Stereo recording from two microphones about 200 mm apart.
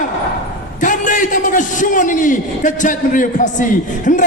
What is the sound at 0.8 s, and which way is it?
A man's voice, 40° left (ahead or behind).